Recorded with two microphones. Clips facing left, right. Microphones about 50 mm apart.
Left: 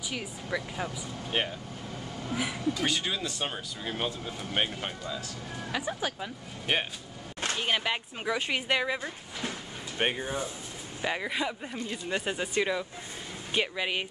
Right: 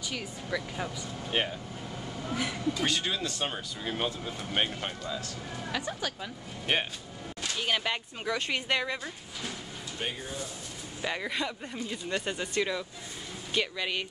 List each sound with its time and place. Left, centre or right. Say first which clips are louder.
0.1 s speech: left 1 dB; centre
6.7 s speech: even; centre
7.5 s speech: even; centre
10.2 s speech: left 5 dB; left
11.0 s speech: left 2 dB; centre